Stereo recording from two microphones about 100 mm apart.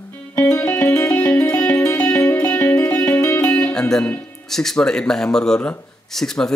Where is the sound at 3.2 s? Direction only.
30° left (ahead or behind).